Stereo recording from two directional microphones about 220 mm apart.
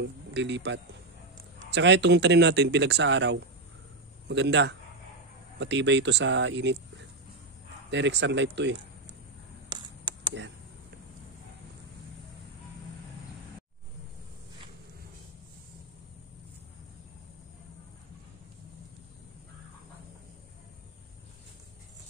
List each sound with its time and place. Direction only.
0.0 s speech: 55° right (ahead or behind)
7.9 s speech: 55° right (ahead or behind)
9.7 s a sound: 20° right (ahead or behind)